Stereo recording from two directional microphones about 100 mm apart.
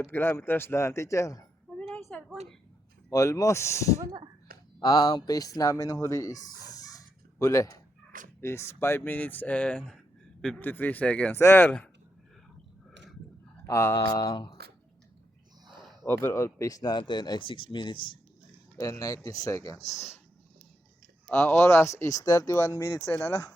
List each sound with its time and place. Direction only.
0.0 s speech: 25° left (ahead or behind)
2.0 s a sound: 5° left (ahead or behind)
3.1 s speech: 35° left (ahead or behind)
4.8 s speech: 40° left (ahead or behind); by 11.9 s 15° left (ahead or behind)
13.7 s speech: 25° left (ahead or behind)
13.9 s speech: 45° left (ahead or behind)
16.0 s speech: 25° left (ahead or behind); by 18.0 s 55° left (ahead or behind)
18.8 s speech: 35° left (ahead or behind)
21.6 s speech: 25° left (ahead or behind)